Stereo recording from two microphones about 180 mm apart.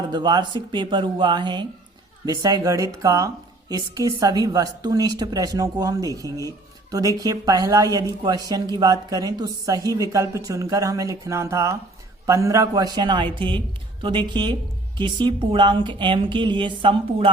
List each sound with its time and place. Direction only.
0.1 s a woman's voice: 25° right (ahead or behind)